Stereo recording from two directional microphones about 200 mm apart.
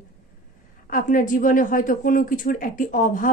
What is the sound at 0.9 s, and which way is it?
A woman's voice, 40° left (ahead or behind).